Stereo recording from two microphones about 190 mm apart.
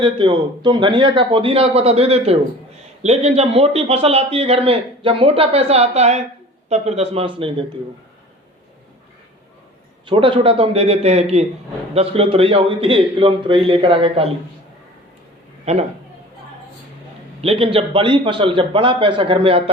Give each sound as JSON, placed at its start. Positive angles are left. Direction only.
{"t": 0.0, "sound": "a man's voice", "side_deg": -25}
{"t": 10.1, "sound": "a man's voice", "side_deg": -25}
{"t": 15.7, "sound": "a man's voice", "side_deg": -35}
{"t": 17.4, "sound": "a man's voice", "side_deg": -30}